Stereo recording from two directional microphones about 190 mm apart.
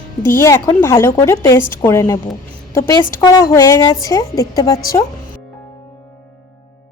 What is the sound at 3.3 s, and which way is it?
A woman's voice, 20° left (ahead or behind).